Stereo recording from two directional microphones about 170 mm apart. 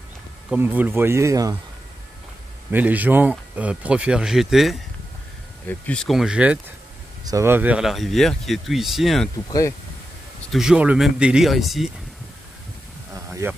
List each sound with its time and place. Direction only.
0.5 s speech: 10° right (ahead or behind)
2.7 s speech: 10° right (ahead or behind)
5.9 s speech: centre (ahead or behind)
9.5 s speech: 20° left (ahead or behind)
10.5 s speech: 5° right (ahead or behind)
13.1 s a sound: 15° right (ahead or behind)